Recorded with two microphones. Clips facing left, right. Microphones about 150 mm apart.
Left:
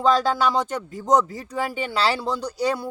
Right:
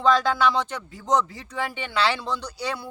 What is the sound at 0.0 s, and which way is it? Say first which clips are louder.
Speech: left 1 dB; 35° left (ahead or behind).